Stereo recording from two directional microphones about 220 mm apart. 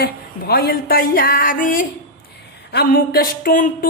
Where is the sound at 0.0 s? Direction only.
45° left (ahead or behind).